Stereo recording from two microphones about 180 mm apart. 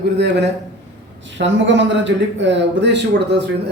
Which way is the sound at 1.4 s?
90° right.